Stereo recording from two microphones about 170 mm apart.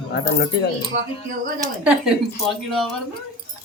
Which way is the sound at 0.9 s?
90° right.